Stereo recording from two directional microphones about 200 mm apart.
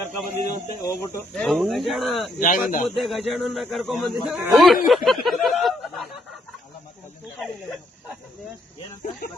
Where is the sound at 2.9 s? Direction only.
Centre (ahead or behind).